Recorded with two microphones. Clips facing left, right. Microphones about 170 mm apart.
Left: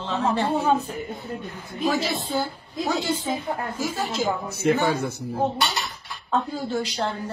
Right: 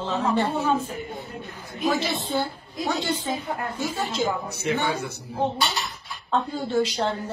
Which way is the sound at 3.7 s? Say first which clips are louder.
Left 1 dB; 5° left (ahead or behind).